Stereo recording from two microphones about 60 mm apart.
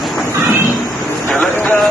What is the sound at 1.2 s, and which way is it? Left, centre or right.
Vehicle, left.